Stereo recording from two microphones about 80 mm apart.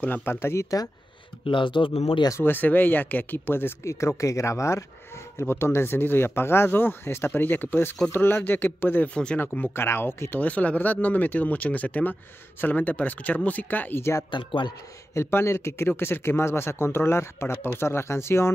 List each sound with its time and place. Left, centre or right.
0.0 s speech: left
1.5 s speech: left
2.4 s speech: left
9.1 s speech: centre
9.8 s speech: left
14.3 s a man's voice: left
15.1 s speech: left